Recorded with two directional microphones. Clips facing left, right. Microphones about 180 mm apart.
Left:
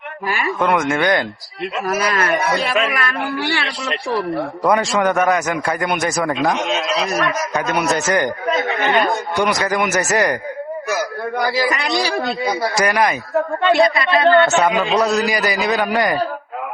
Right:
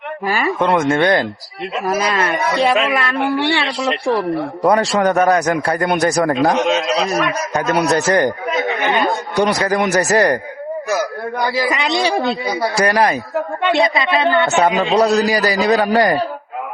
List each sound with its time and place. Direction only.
0.3 s a man's voice: 35° right (ahead or behind)
4.7 s a man's voice: 35° right (ahead or behind)
9.4 s a man's voice: 30° right (ahead or behind)
11.7 s a man's voice: 20° right (ahead or behind)
13.7 s a woman's voice: 20° right (ahead or behind)
14.6 s a man's voice: 25° right (ahead or behind)